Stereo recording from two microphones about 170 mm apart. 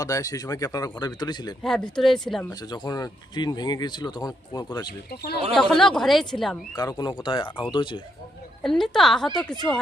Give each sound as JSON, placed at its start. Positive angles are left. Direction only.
{"t": 0.0, "sound": "speech", "side_deg": 20}
{"t": 1.6, "sound": "a woman's voice", "side_deg": 0}
{"t": 2.5, "sound": "speech", "side_deg": 25}
{"t": 4.9, "sound": "speech", "side_deg": 65}
{"t": 5.5, "sound": "a woman's voice", "side_deg": 0}
{"t": 6.7, "sound": "speech", "side_deg": 25}
{"t": 8.6, "sound": "a woman's voice", "side_deg": 0}